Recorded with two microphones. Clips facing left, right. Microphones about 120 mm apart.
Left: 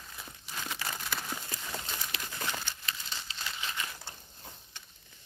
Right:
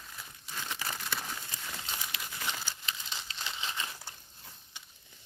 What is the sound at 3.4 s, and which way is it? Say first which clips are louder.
Crumpling: even; 20° right (ahead or behind).